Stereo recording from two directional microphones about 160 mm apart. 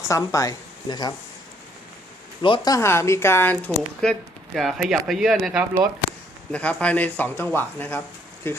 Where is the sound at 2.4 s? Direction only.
25° left (ahead or behind); by 5.6 s centre (ahead or behind).